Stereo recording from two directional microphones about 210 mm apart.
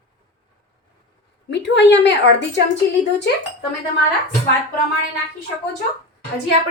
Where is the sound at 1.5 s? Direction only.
55° left (ahead or behind).